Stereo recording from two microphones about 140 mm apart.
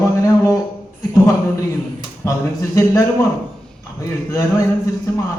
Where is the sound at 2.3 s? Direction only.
20° left (ahead or behind).